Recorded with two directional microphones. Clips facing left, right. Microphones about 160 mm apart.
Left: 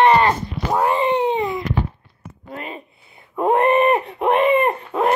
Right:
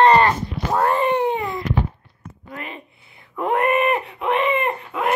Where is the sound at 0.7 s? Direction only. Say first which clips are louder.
Left 1 dB; 15° left (ahead or behind).